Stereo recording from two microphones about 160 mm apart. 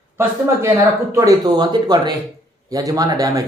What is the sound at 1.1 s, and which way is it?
Speech, 20° right (ahead or behind).